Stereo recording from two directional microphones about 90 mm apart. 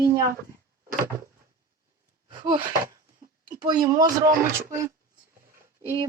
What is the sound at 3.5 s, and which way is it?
Speech, 50° right (ahead or behind).